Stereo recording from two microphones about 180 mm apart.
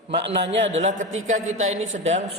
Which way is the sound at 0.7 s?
40° right (ahead or behind).